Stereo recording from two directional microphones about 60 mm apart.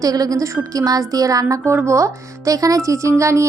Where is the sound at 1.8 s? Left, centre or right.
Right.